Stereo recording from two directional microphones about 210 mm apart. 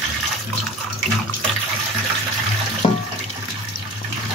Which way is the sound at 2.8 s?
20° left (ahead or behind).